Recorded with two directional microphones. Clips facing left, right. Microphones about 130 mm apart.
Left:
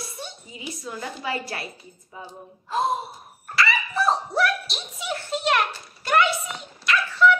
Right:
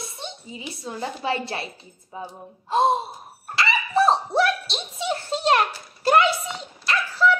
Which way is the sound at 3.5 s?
25° right (ahead or behind).